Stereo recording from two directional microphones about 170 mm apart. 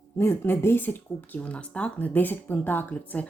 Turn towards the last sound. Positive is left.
turn(degrees=10)  # may be behind; listen again after turning